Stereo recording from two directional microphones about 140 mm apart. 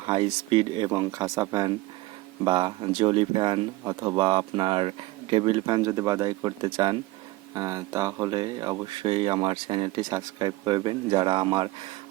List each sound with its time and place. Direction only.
0.0 s speech: 35° right (ahead or behind)
2.4 s speech: 35° right (ahead or behind)